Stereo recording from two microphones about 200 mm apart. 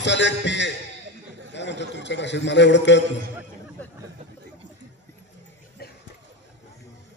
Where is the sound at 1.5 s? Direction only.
60° left (ahead or behind).